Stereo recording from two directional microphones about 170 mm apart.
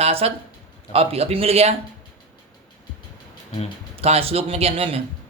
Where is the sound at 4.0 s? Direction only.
35° right (ahead or behind).